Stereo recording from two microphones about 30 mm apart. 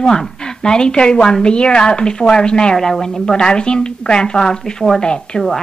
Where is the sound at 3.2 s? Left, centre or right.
Left.